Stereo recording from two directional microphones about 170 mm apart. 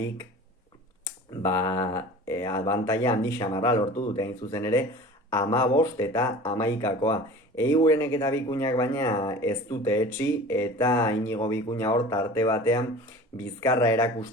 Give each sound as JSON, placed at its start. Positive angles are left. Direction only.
{"t": 1.4, "sound": "speech", "side_deg": 20}
{"t": 3.9, "sound": "speech", "side_deg": 30}
{"t": 4.2, "sound": "speech", "side_deg": 20}